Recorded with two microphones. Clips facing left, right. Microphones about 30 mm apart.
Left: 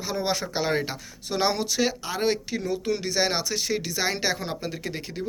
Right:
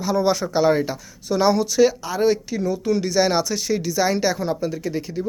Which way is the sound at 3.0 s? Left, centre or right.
Centre.